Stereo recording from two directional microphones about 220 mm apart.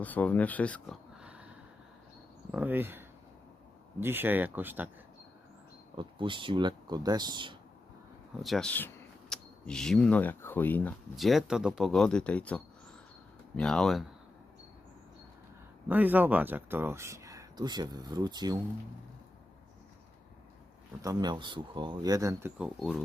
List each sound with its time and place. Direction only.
0.0 s speech: 5° left (ahead or behind)
1.2 s a sound: 5° right (ahead or behind)
2.5 s speech: 10° right (ahead or behind)
4.0 s speech: 10° right (ahead or behind)
6.0 s speech: 20° right (ahead or behind)
8.4 s speech: centre (ahead or behind)
15.9 s speech: 10° right (ahead or behind)
21.0 s speech: 15° right (ahead or behind); by 23.0 s centre (ahead or behind)